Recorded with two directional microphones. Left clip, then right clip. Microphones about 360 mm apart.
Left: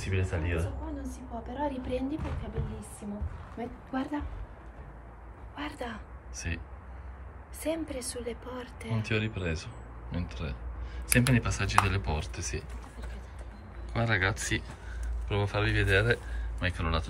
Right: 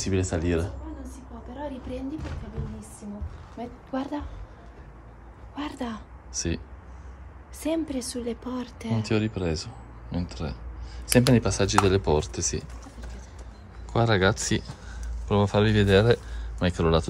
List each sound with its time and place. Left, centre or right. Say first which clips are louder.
0.0 s speech: right 7 dB; centre
1.1 s a woman's voice: left 2 dB; centre
3.5 s speech: right 3 dB; centre
5.6 s speech: right 4 dB; right
6.3 s speech: right 8 dB; centre
7.6 s speech: right 5 dB; right
8.9 s speech: right 5 dB; centre
13.9 s speech: right 6 dB; centre